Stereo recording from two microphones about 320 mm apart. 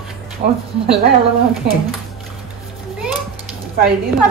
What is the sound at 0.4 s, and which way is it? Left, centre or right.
Speech, centre.